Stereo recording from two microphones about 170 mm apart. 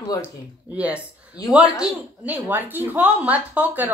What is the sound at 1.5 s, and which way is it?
Speech, 5° right (ahead or behind).